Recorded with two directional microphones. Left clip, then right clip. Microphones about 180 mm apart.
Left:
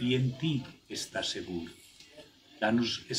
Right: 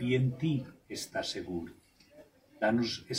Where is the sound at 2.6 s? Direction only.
10° right (ahead or behind).